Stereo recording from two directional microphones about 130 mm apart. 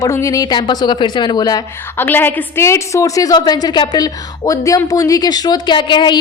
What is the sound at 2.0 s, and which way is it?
Speech, 15° left (ahead or behind).